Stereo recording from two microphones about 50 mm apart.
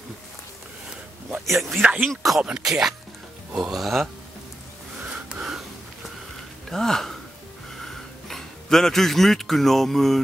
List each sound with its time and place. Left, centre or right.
1.4 s speech: centre
3.8 s speech: centre
5.1 s gasp: centre
6.7 s speech: centre